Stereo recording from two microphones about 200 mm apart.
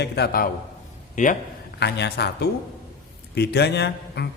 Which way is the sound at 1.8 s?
60° left (ahead or behind).